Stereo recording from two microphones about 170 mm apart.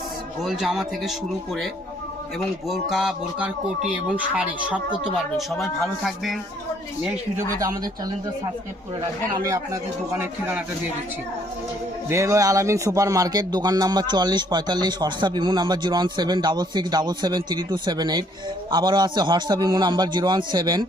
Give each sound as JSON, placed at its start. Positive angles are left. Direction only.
{"t": 0.4, "sound": "speech", "side_deg": 0}
{"t": 2.6, "sound": "speech", "side_deg": 0}
{"t": 10.1, "sound": "speech", "side_deg": -10}
{"t": 12.0, "sound": "speech", "side_deg": -15}